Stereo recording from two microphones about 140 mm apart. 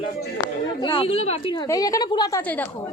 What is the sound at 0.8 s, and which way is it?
Speech, 40° left (ahead or behind).